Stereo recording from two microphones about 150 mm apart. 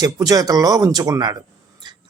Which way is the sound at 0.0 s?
25° right (ahead or behind).